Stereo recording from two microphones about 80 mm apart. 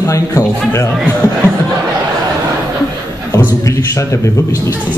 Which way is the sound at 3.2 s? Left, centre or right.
Left.